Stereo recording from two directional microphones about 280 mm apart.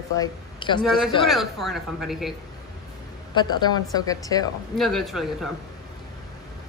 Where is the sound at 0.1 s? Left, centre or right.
Centre.